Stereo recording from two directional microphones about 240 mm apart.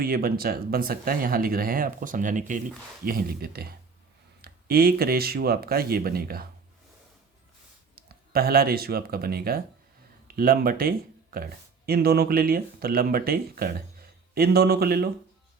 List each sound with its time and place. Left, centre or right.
0.0 s speech: right
7.9 s speech: right